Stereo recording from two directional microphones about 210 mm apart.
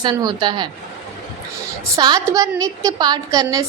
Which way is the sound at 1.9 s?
15° right (ahead or behind).